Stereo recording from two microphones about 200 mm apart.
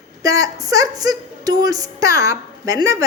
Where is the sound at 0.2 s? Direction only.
15° right (ahead or behind).